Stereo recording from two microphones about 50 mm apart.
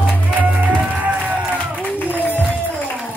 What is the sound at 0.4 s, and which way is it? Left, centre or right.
Music, right.